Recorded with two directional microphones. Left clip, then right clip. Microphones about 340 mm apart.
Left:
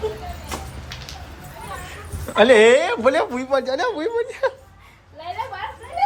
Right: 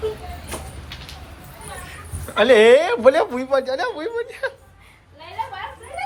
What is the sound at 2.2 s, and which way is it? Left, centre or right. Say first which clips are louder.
Speech: even; centre.